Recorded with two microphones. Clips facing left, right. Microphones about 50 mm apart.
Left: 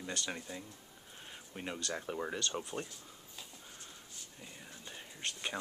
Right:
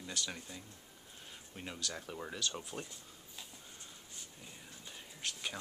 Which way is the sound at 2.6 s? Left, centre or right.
Centre.